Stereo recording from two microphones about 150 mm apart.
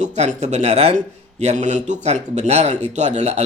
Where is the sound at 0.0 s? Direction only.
50° right (ahead or behind).